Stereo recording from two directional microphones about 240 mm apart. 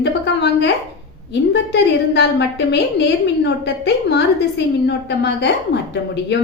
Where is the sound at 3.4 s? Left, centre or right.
Left.